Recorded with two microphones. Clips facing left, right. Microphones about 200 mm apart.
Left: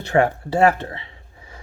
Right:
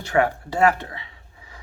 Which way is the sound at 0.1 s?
35° left (ahead or behind).